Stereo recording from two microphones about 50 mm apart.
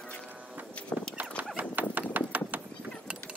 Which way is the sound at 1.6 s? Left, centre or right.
Right.